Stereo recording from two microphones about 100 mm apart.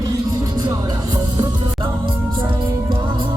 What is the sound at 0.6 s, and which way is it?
Music, 40° right (ahead or behind).